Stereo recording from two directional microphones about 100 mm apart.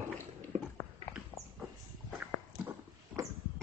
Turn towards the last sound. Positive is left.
turn(degrees=-35)  # may be behind; listen again after turning